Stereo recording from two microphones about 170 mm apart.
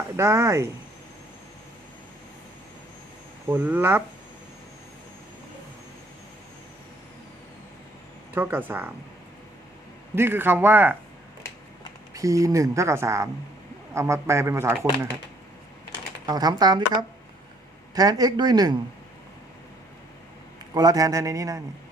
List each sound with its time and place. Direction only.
0.2 s speech: 15° right (ahead or behind)
3.5 s speech: 10° right (ahead or behind)
8.4 s speech: 10° right (ahead or behind)
10.2 s speech: 15° right (ahead or behind)
12.1 s speech: 20° right (ahead or behind)
16.2 s speech: 25° right (ahead or behind)
17.9 s speech: 25° right (ahead or behind)
20.7 s speech: 20° right (ahead or behind)